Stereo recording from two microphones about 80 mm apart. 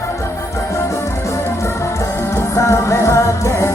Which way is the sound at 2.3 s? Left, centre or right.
Left.